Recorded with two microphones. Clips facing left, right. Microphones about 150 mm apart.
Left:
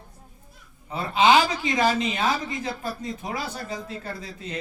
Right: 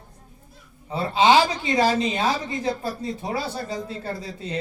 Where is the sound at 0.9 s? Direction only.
30° right (ahead or behind).